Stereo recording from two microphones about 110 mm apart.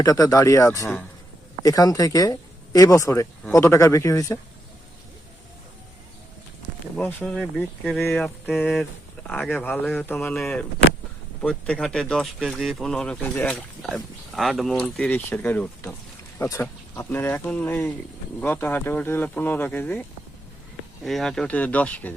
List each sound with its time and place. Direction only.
0.0 s speech: 35° left (ahead or behind)
7.3 s speech: 5° left (ahead or behind)
8.0 s speech: 15° left (ahead or behind)
10.3 s speech: 5° left (ahead or behind)
14.3 s speech: centre (ahead or behind)
15.1 s speech: 15° left (ahead or behind)
21.0 s speech: centre (ahead or behind)